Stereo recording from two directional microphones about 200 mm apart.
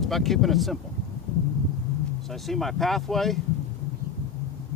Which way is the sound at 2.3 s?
Centre (ahead or behind).